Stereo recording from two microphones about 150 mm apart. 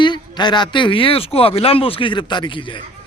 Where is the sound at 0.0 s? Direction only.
30° left (ahead or behind).